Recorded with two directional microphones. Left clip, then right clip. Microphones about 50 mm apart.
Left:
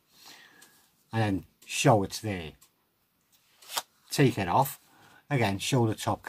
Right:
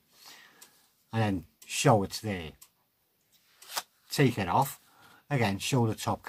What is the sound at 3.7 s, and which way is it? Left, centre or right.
Speech, left.